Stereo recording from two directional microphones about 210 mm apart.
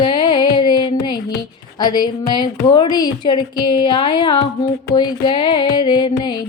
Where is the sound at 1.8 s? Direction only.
20° left (ahead or behind).